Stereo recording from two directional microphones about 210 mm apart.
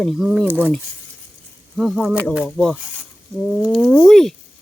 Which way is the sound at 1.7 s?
Centre (ahead or behind).